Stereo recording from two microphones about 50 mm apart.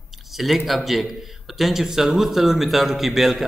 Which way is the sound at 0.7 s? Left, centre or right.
Centre.